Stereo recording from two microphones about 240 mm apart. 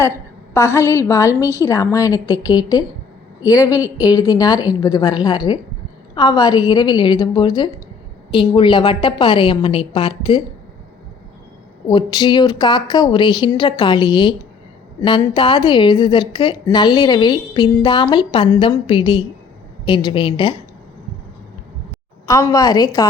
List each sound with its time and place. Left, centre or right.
0.5 s a woman's voice: centre
11.9 s a woman's voice: centre
22.3 s a woman's voice: centre